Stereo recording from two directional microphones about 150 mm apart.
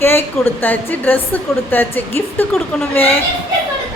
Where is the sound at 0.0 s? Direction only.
15° left (ahead or behind).